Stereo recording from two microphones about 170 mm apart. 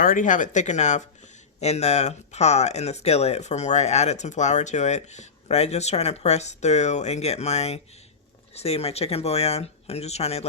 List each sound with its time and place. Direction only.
0.0 s speech: 50° left (ahead or behind)